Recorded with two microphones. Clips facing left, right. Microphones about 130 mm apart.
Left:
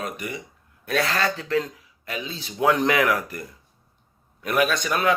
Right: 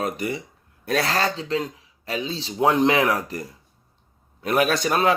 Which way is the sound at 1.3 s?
20° right (ahead or behind).